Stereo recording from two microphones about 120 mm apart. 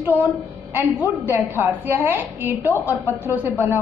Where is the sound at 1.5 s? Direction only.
15° right (ahead or behind).